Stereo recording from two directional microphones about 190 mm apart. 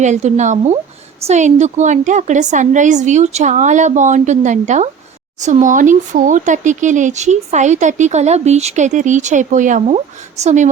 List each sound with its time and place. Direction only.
0.0 s speech: 40° right (ahead or behind)